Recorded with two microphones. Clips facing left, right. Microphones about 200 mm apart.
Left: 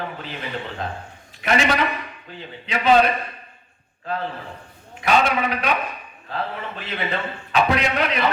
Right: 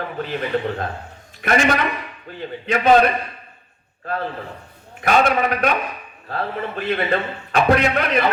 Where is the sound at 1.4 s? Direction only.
50° right (ahead or behind).